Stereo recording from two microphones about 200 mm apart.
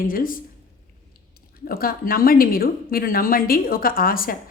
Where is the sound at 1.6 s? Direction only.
45° left (ahead or behind).